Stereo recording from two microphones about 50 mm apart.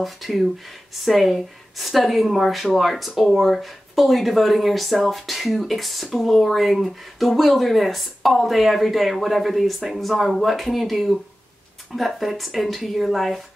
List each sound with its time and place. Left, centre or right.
0.0 s speech: centre